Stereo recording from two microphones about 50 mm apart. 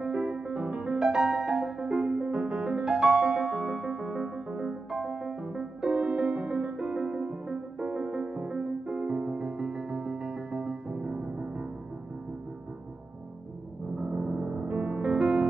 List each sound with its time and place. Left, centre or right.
0.0 s music: centre
0.9 s music: centre
13.9 s music: right